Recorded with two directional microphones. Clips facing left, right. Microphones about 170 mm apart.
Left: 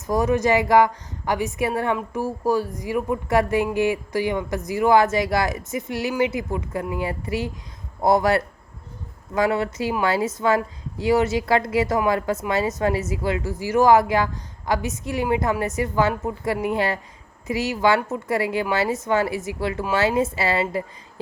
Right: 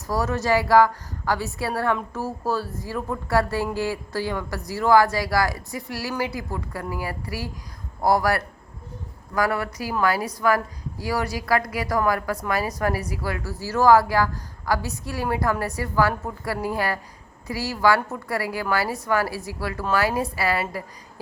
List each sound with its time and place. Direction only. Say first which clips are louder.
0.1 s a woman's voice: left 3 dB; 20° left (ahead or behind)